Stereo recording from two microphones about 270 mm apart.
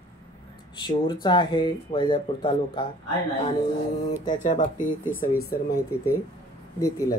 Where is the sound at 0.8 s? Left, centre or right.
Centre.